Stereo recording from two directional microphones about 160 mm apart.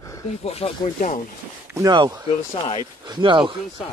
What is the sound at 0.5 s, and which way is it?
Speech, 40° left (ahead or behind).